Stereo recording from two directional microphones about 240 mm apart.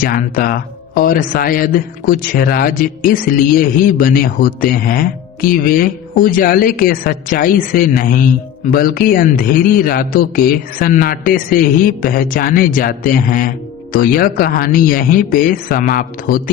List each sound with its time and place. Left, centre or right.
0.0 s speech: left